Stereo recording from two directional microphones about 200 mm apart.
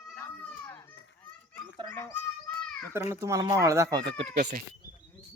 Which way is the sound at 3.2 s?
15° right (ahead or behind).